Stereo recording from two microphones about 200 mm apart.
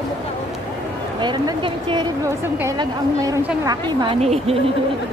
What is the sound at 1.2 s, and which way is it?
A woman's voice, 25° right (ahead or behind).